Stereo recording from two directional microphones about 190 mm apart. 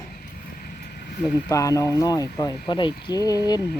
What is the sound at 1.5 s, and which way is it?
Speech, 15° left (ahead or behind).